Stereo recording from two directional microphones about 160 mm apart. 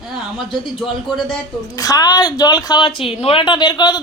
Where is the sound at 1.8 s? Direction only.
20° left (ahead or behind).